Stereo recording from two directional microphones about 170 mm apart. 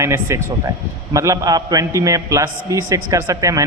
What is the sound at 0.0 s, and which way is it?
A man's voice, 15° right (ahead or behind).